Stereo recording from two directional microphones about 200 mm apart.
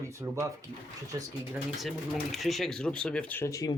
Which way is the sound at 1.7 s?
Centre (ahead or behind).